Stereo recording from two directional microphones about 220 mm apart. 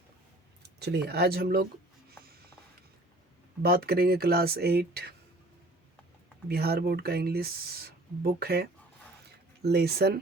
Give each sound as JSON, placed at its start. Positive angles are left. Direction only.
{"t": 0.8, "sound": "speech", "side_deg": -50}
{"t": 3.6, "sound": "speech", "side_deg": -45}
{"t": 6.5, "sound": "speech", "side_deg": -45}
{"t": 9.6, "sound": "speech", "side_deg": -45}